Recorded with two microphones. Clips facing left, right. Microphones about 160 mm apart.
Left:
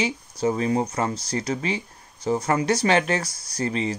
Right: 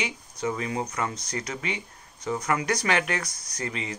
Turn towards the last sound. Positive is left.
turn(degrees=35)  # may be behind; listen again after turning